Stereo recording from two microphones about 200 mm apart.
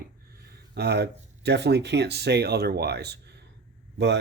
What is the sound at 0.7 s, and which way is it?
Speech, 55° right (ahead or behind).